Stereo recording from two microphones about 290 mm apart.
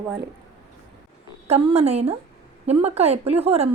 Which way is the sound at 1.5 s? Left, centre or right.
Right.